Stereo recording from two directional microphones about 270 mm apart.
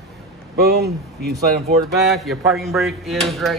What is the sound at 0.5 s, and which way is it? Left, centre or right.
Speech, right.